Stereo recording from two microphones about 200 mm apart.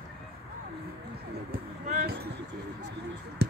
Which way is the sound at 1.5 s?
45° right (ahead or behind).